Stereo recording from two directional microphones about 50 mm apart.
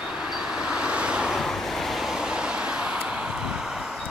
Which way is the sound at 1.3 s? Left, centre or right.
Centre.